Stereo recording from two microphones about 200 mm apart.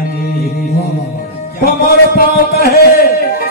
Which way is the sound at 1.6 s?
45° left (ahead or behind).